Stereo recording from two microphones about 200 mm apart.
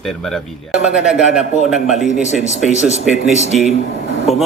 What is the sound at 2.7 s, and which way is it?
Speech, 35° left (ahead or behind).